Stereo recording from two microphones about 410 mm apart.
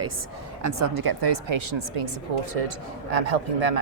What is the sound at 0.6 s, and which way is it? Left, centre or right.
Speech, right.